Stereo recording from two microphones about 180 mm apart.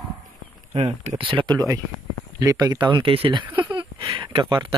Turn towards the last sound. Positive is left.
turn(degrees=-20)  # may be behind; listen again after turning